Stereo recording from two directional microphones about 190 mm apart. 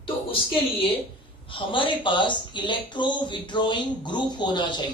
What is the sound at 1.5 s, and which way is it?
Speech, 25° left (ahead or behind).